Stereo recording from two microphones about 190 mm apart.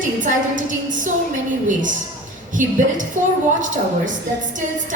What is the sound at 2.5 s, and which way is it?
A woman's voice, 40° right (ahead or behind).